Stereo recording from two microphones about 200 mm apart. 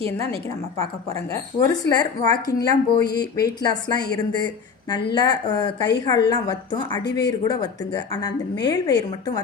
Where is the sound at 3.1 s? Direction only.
55° left (ahead or behind).